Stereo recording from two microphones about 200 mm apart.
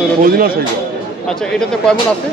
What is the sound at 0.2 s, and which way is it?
Speech, 50° right (ahead or behind).